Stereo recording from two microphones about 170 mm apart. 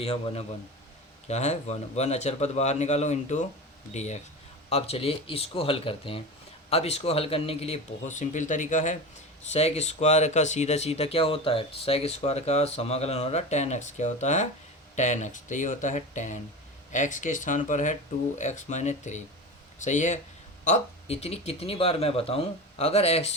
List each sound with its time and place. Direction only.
0.0 s speech: 35° left (ahead or behind)